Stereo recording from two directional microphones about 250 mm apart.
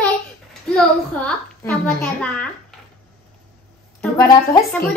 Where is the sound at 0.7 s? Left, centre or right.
Centre.